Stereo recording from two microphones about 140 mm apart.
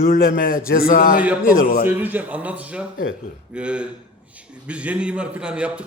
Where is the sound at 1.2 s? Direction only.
10° right (ahead or behind).